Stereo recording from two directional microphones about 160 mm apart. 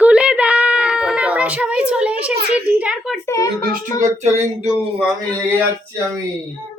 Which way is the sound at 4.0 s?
50° right (ahead or behind).